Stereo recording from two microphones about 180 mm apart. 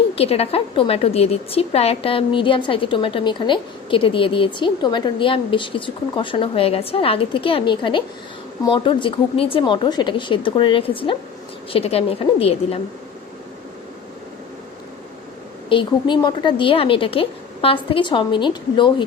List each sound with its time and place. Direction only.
0.2 s a woman's voice: 35° left (ahead or behind)
15.7 s a woman's voice: 25° left (ahead or behind)